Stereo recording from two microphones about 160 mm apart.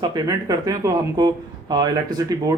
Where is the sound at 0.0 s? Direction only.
25° right (ahead or behind).